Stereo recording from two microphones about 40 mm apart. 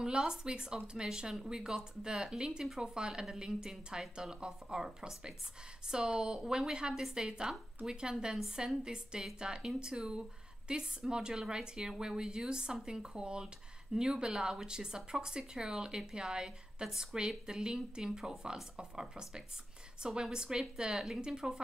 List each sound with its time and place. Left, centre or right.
0.0 s a woman's voice: centre
3.7 s speech: centre
4.2 s a woman's voice: centre